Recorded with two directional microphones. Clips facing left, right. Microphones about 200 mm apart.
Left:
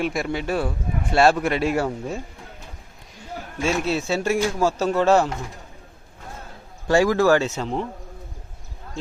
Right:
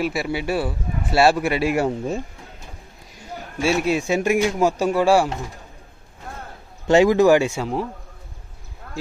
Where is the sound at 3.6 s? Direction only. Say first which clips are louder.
Right 3 dB; 10° right (ahead or behind).